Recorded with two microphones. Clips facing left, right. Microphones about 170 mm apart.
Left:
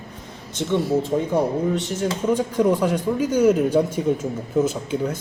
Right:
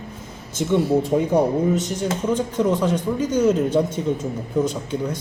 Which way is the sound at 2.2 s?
10° left (ahead or behind).